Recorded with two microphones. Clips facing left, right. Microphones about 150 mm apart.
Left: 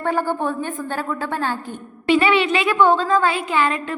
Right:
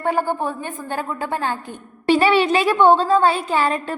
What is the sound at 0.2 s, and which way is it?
A woman's voice, 15° right (ahead or behind).